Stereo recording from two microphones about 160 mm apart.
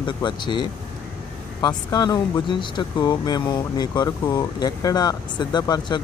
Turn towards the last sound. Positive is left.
turn(degrees=25)  # may be behind; listen again after turning